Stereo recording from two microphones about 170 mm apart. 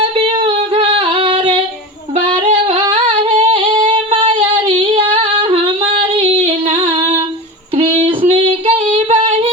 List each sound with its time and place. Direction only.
0.0 s singing: 30° right (ahead or behind)
2.1 s female singing: 35° right (ahead or behind)